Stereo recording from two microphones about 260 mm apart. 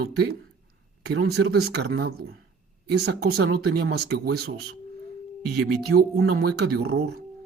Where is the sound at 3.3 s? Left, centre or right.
Right.